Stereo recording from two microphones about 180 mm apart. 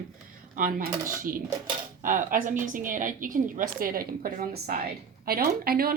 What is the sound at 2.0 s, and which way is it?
Speech, 50° right (ahead or behind).